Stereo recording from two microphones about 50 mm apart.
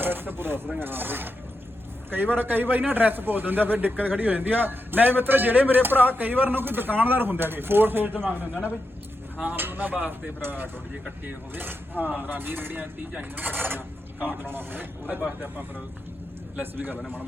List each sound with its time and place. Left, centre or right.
0.0 s a man's voice: right
9.5 s a man's voice: right
12.8 s a man's voice: right
16.6 s a man's voice: right